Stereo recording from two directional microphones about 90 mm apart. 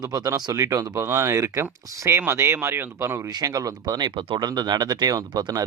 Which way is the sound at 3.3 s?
45° right (ahead or behind).